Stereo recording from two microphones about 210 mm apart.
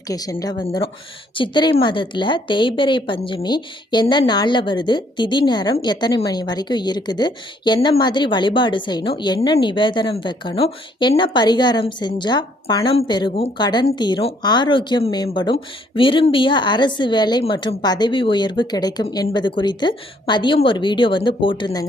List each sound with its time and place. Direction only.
0.1 s a woman's voice: 15° left (ahead or behind)